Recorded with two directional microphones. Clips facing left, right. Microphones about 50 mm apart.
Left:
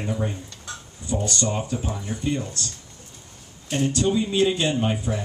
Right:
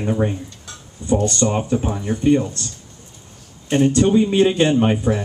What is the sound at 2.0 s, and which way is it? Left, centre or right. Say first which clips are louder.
Speech: right 12 dB; right.